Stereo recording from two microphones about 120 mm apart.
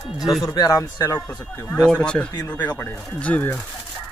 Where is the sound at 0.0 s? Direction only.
Centre (ahead or behind).